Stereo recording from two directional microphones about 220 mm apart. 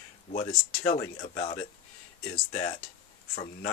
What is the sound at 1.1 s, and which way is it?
Speech, 30° left (ahead or behind).